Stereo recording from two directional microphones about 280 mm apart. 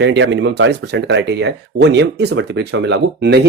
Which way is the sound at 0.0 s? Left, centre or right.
Right.